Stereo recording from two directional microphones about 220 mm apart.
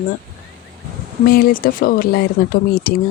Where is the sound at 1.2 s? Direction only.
40° left (ahead or behind).